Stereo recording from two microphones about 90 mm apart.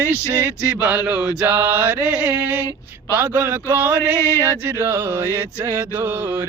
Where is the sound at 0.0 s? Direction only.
20° right (ahead or behind).